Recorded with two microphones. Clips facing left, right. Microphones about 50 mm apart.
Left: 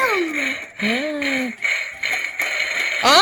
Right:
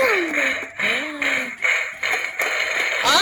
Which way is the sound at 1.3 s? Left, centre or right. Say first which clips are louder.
Right 1 dB; right.